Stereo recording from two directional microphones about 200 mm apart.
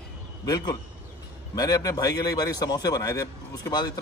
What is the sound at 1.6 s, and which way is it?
A man's voice, 20° left (ahead or behind).